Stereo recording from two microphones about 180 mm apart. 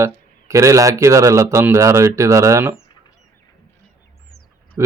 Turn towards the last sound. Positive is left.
turn(degrees=-15)  # may be behind; listen again after turning